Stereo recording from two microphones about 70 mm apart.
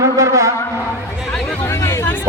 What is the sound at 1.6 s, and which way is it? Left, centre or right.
Hubbub, left.